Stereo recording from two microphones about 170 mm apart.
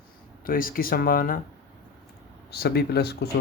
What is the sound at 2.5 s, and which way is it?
Speech, 70° left (ahead or behind).